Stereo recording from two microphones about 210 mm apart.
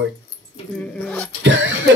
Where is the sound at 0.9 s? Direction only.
5° left (ahead or behind).